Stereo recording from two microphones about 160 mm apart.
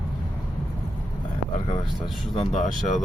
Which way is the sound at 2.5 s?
50° left (ahead or behind).